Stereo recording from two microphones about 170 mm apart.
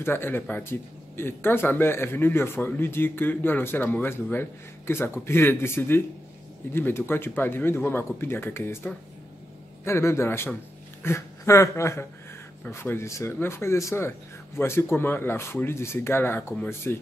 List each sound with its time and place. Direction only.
0.0 s speech: 15° left (ahead or behind)